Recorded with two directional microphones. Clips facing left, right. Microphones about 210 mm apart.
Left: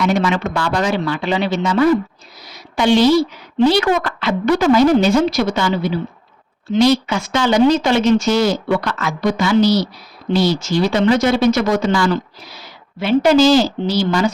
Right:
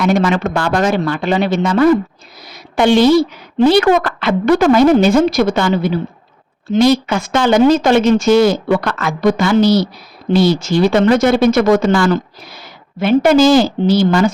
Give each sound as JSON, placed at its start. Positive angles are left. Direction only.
{"t": 0.0, "sound": "speech", "side_deg": -50}